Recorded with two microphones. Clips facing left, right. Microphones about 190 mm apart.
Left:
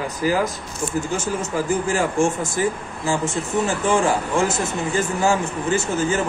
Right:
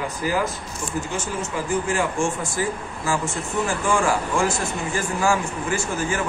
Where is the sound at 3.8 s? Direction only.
20° left (ahead or behind).